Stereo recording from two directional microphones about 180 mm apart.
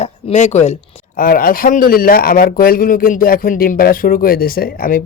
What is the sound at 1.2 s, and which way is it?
A man's voice, 50° left (ahead or behind).